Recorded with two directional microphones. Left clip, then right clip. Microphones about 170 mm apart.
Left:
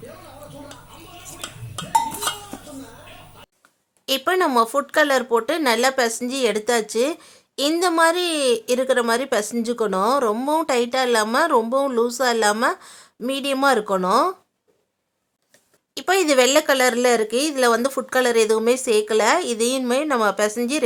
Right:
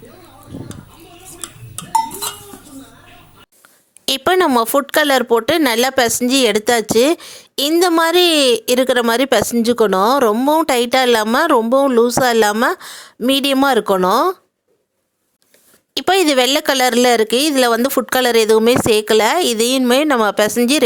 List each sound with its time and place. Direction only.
4.0 s a woman's voice: 50° right (ahead or behind)
16.0 s a woman's voice: 45° right (ahead or behind)